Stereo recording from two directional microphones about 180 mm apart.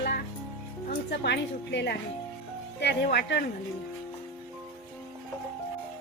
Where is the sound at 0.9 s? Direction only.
70° left (ahead or behind).